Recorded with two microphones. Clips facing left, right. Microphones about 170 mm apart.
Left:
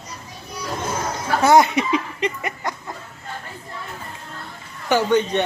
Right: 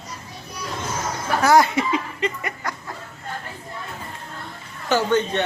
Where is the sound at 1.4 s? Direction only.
20° left (ahead or behind).